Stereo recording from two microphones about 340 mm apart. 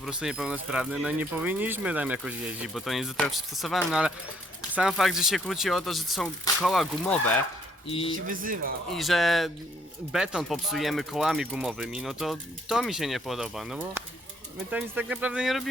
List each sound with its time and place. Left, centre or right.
0.0 s speech: centre
7.9 s speech: centre
8.3 s speech: right
8.9 s speech: centre